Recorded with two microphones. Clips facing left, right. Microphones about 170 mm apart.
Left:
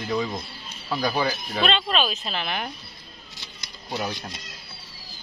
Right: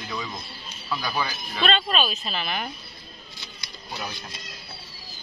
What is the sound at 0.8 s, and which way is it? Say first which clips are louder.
Speech: left 4 dB; 35° left (ahead or behind).